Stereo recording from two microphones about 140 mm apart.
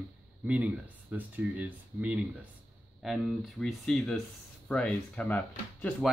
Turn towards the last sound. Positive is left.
turn(degrees=10)  # may be behind; listen again after turning